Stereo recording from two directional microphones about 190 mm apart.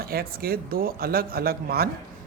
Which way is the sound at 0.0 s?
50° right (ahead or behind).